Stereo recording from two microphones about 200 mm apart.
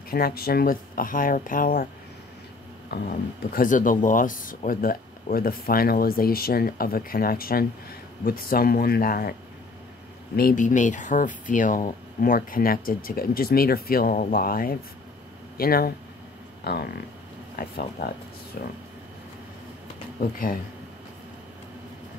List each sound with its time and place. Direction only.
0.1 s speech: 50° left (ahead or behind)
2.9 s speech: 50° left (ahead or behind)
10.3 s speech: 45° left (ahead or behind)
20.2 s speech: 45° left (ahead or behind)